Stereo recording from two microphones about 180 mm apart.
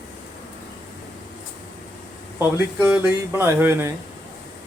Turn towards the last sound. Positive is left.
turn(degrees=-15)  # may be behind; listen again after turning